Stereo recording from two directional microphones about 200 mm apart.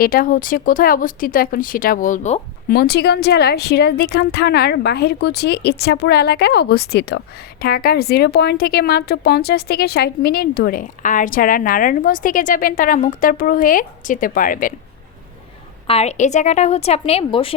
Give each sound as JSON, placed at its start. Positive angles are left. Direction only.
{"t": 0.0, "sound": "a woman's voice", "side_deg": 45}
{"t": 2.6, "sound": "a woman's voice", "side_deg": 50}
{"t": 15.9, "sound": "a woman's voice", "side_deg": 30}